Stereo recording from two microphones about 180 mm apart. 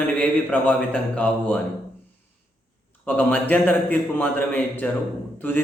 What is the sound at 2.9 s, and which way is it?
A man's voice, 10° left (ahead or behind).